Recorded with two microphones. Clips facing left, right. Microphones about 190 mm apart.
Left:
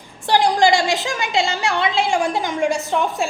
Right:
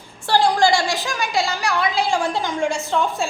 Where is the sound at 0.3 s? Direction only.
20° left (ahead or behind).